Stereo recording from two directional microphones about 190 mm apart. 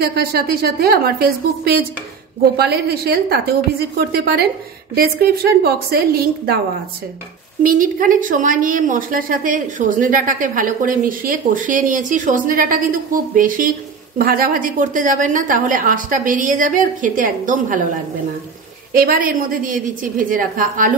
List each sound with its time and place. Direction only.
0.0 s a woman's voice: 55° right (ahead or behind)
7.6 s a woman's voice: 45° right (ahead or behind)
18.9 s a woman's voice: 50° right (ahead or behind)